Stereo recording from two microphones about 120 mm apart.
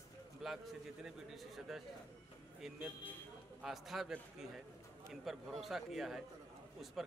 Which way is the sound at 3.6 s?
Centre (ahead or behind).